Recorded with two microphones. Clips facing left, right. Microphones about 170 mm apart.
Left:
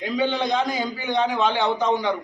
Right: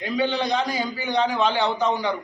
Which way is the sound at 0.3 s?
20° left (ahead or behind).